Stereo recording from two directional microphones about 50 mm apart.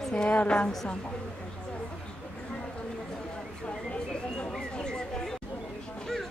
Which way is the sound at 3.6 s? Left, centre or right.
Left.